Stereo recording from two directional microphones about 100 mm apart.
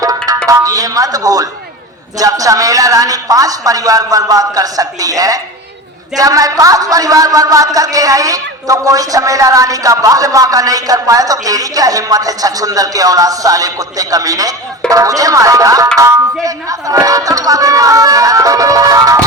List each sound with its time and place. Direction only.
0.0 s tabla: 35° right (ahead or behind)
0.4 s a woman's voice: 35° right (ahead or behind)